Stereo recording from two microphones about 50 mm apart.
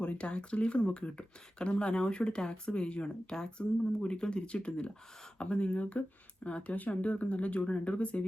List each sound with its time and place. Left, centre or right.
0.0 s speech: left